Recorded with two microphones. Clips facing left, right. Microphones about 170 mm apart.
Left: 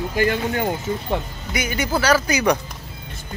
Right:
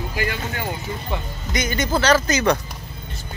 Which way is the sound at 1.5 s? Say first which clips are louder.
Right 1 dB; 10° left (ahead or behind).